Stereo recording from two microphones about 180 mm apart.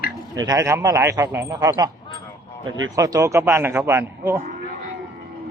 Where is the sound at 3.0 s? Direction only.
20° right (ahead or behind).